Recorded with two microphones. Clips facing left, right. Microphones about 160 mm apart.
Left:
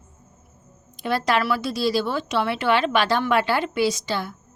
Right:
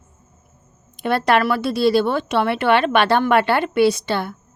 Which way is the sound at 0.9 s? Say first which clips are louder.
Right 5 dB; 60° right (ahead or behind).